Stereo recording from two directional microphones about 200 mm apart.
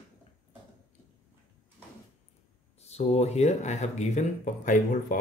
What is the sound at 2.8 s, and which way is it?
Speech, 30° left (ahead or behind).